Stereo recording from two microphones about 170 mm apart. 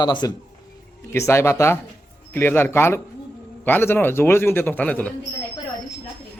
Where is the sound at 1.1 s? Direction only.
15° left (ahead or behind).